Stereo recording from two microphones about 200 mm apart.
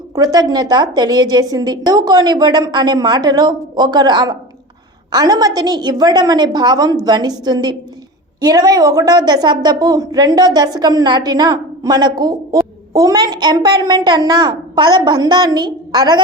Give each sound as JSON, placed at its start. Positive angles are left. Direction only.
{"t": 0.2, "sound": "a woman's voice", "side_deg": -20}